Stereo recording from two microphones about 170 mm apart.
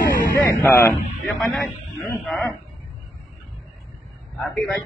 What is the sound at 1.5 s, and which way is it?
A man's voice, centre (ahead or behind).